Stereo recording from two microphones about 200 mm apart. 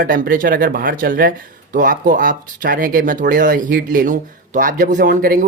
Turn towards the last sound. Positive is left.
turn(degrees=-45)  # may be behind; listen again after turning